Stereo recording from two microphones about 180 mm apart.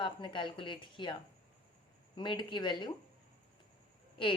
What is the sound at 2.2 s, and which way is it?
Speech, 25° left (ahead or behind).